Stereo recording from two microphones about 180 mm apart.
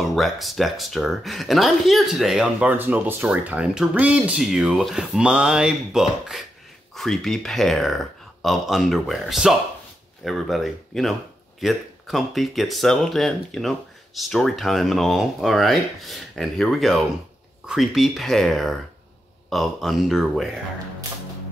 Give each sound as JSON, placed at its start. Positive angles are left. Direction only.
{"t": 0.0, "sound": "speech", "side_deg": 0}